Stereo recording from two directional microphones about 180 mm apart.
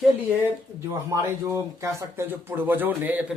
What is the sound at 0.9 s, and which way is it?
Speech, 15° right (ahead or behind).